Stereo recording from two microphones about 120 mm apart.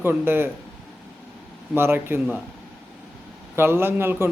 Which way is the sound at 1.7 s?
20° right (ahead or behind).